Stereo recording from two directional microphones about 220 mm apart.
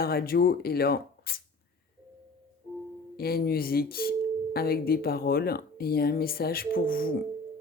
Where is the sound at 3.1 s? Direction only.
45° left (ahead or behind).